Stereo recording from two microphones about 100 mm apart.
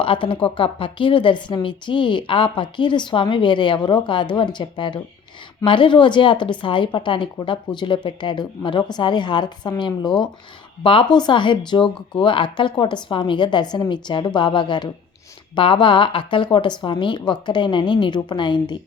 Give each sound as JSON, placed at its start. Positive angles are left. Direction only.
{"t": 0.0, "sound": "a woman's voice", "side_deg": 60}